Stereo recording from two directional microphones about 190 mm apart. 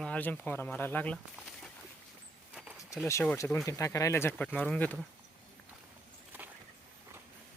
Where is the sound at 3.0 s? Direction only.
10° left (ahead or behind).